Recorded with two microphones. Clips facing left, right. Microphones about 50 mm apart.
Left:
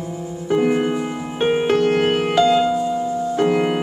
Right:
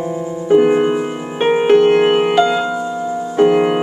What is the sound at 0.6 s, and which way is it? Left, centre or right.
Music, right.